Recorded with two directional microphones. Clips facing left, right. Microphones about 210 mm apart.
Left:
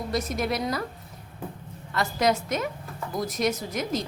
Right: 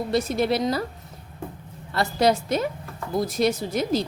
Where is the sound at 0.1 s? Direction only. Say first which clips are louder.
Right 5 dB; 30° right (ahead or behind).